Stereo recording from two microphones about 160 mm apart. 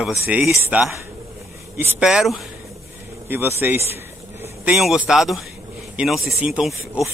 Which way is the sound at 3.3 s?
15° right (ahead or behind).